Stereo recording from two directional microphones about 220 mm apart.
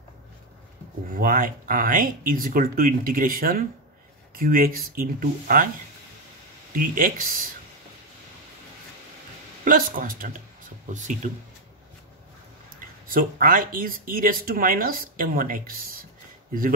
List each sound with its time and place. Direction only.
1.1 s speech: 40° right (ahead or behind)
6.7 s speech: 40° right (ahead or behind)
9.7 s speech: 40° right (ahead or behind)
13.1 s speech: 40° right (ahead or behind)